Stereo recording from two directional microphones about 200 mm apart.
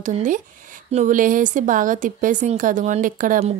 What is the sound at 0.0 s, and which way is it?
A woman's voice, 40° right (ahead or behind).